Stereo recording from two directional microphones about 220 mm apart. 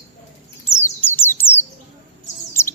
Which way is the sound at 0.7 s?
10° left (ahead or behind).